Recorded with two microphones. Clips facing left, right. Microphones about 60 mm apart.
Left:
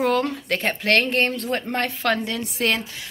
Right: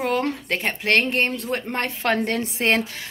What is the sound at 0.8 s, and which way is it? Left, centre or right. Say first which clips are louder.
Speech: even; right.